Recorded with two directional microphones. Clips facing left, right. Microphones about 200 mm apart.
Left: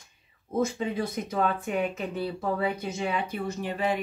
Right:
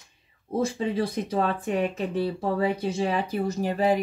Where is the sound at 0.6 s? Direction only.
30° right (ahead or behind).